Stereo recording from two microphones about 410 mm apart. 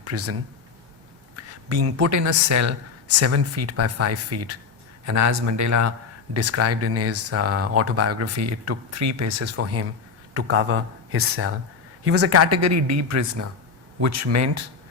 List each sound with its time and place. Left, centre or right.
0.0 s speech: right
1.4 s a woman's voice: right